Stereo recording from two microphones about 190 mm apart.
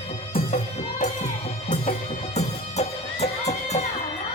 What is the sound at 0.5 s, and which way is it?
Music, 40° left (ahead or behind).